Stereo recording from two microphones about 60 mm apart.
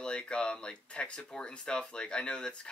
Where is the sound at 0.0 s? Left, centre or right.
Centre.